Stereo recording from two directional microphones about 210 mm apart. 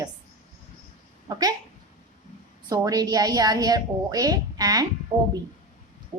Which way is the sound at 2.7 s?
15° right (ahead or behind).